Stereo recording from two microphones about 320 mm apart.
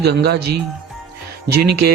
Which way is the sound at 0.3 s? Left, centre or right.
Right.